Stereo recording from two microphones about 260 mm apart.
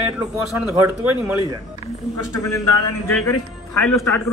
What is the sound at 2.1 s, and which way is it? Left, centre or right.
Speech, left.